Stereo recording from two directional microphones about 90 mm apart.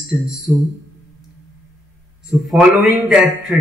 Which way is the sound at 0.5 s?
20° right (ahead or behind).